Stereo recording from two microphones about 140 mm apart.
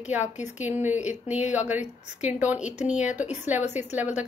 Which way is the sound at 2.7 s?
55° left (ahead or behind).